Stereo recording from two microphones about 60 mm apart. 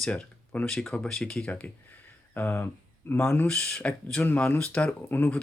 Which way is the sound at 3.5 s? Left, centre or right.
Centre.